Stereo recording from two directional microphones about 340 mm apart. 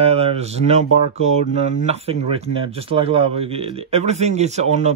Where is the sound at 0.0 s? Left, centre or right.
Centre.